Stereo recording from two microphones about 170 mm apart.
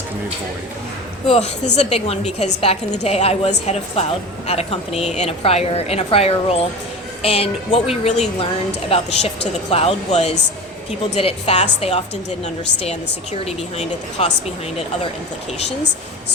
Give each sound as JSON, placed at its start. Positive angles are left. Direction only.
{"t": 1.3, "sound": "speech", "side_deg": 40}
{"t": 13.4, "sound": "speech", "side_deg": 35}